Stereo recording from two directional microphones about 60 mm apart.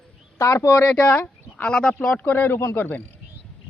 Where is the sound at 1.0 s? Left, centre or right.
Left.